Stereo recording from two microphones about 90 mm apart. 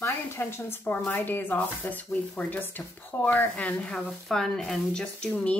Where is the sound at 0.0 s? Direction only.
30° left (ahead or behind).